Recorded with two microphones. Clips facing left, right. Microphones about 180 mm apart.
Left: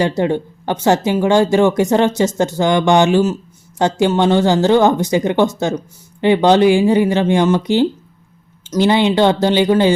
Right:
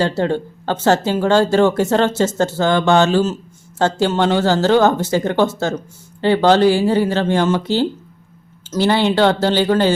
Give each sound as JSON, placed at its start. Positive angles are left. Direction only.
{"t": 0.2, "sound": "speech", "side_deg": 15}